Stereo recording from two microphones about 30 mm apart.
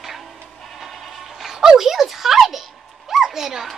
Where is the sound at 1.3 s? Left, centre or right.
Centre.